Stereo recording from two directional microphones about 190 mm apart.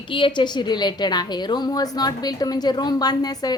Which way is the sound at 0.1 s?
25° left (ahead or behind).